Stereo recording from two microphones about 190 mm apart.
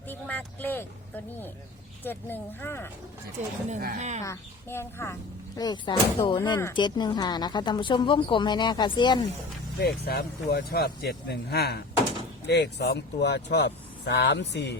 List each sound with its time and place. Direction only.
0.1 s a woman's voice: 10° left (ahead or behind)
3.7 s speech: 45° right (ahead or behind)
4.3 s a woman's voice: 15° left (ahead or behind)
9.8 s speech: 55° left (ahead or behind)